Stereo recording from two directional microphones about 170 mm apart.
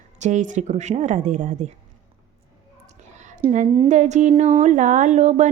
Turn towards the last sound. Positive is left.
turn(degrees=-45)  # may be behind; listen again after turning